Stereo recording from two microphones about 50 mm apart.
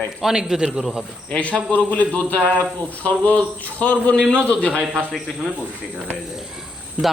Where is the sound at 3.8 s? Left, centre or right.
Left.